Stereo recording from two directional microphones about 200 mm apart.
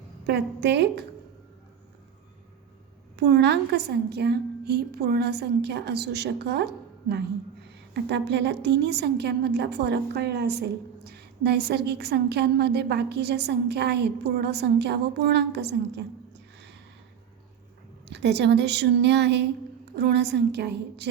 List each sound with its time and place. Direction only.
0.3 s a woman's voice: 60° right (ahead or behind)
3.2 s a woman's voice: 60° right (ahead or behind)
8.0 s a woman's voice: 60° right (ahead or behind)
18.1 s a woman's voice: 55° right (ahead or behind)